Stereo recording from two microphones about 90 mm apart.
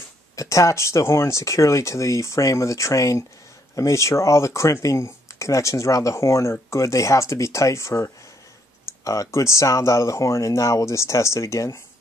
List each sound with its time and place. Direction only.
0.4 s speech: 35° left (ahead or behind)